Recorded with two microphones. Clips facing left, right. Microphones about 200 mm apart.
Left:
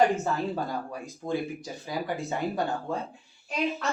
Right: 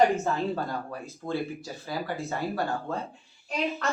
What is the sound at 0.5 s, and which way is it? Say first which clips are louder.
Speech: even; 15° left (ahead or behind).